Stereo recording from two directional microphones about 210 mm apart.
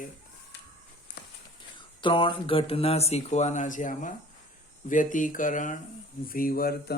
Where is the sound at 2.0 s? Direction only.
25° left (ahead or behind).